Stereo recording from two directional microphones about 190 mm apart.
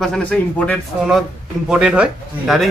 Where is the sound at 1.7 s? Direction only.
5° right (ahead or behind).